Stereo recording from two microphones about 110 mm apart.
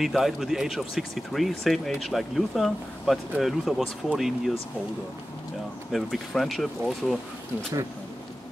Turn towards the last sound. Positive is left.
turn(degrees=0)  # may be behind; listen again after turning